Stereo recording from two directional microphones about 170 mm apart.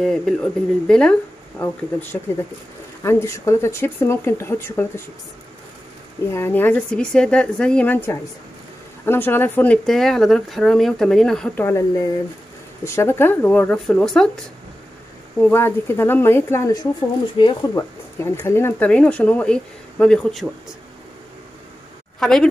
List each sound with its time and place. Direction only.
0.0 s speech: centre (ahead or behind)
6.3 s speech: 10° left (ahead or behind)
15.4 s speech: 15° left (ahead or behind)
18.2 s speech: 15° left (ahead or behind)
22.2 s speech: 5° left (ahead or behind)